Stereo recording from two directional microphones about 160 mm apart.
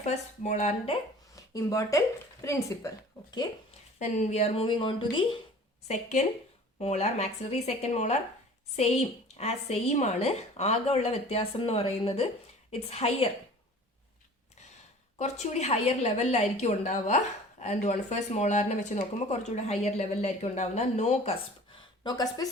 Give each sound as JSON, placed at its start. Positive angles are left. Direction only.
{"t": 0.0, "sound": "a woman's voice", "side_deg": 50}
{"t": 1.4, "sound": "speech", "side_deg": 20}
{"t": 3.9, "sound": "a woman's voice", "side_deg": 50}
{"t": 5.9, "sound": "a woman's voice", "side_deg": 45}
{"t": 15.2, "sound": "a woman's voice", "side_deg": 45}
{"t": 22.0, "sound": "speech", "side_deg": 25}